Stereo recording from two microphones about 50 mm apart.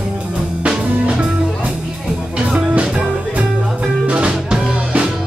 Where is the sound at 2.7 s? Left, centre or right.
Right.